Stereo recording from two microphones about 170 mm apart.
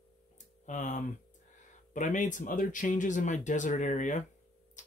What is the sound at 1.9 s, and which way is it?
Speech, 45° left (ahead or behind).